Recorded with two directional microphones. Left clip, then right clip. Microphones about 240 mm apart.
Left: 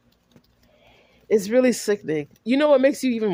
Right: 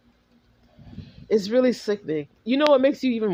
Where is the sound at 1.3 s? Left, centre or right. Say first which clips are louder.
Left 2 dB; left.